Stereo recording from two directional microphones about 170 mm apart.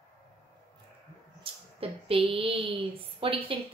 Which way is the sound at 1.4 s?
35° right (ahead or behind).